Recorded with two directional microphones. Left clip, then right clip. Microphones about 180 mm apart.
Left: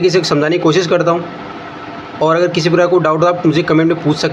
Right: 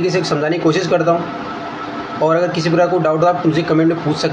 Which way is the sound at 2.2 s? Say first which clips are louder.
Left 3 dB; 35° left (ahead or behind).